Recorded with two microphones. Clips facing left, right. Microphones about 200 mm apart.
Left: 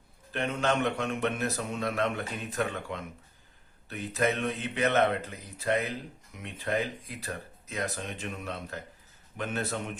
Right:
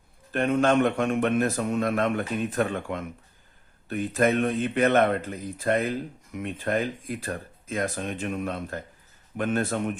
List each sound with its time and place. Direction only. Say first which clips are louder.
0.3 s a man's voice: right 7 dB; 50° right (ahead or behind)